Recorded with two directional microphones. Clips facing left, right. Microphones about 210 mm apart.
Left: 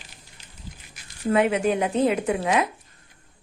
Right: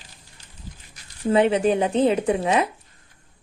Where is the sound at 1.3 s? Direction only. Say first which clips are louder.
Right 3 dB; 30° right (ahead or behind).